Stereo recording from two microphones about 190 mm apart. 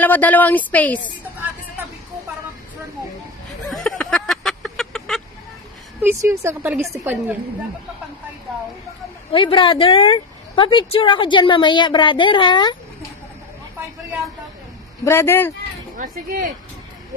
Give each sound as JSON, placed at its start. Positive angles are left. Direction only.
{"t": 0.0, "sound": "speech", "side_deg": 10}
{"t": 3.6, "sound": "fowl", "side_deg": 0}
{"t": 5.9, "sound": "a woman's voice", "side_deg": -15}
{"t": 9.3, "sound": "a woman's voice", "side_deg": 25}
{"t": 15.0, "sound": "speech", "side_deg": 10}